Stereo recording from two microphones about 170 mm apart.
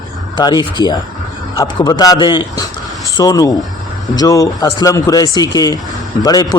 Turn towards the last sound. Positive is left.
turn(degrees=25)  # may be behind; listen again after turning